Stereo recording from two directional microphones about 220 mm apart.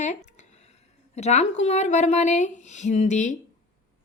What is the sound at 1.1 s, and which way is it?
Speech, 30° left (ahead or behind).